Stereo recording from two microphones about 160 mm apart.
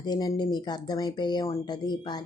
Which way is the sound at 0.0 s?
25° left (ahead or behind).